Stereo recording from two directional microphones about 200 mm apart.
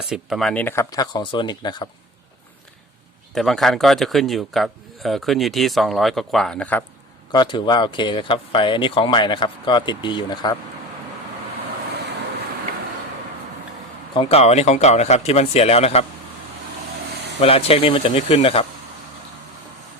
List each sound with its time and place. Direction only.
0.1 s speech: centre (ahead or behind); by 1.9 s 20° left (ahead or behind)
3.3 s a man's voice: centre (ahead or behind)
7.3 s speech: 25° left (ahead or behind)
14.1 s speech: 30° left (ahead or behind)
17.4 s speech: 30° left (ahead or behind)